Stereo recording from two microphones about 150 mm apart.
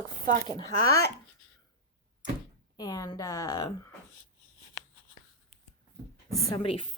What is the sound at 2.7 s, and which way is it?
A woman's voice, 25° left (ahead or behind).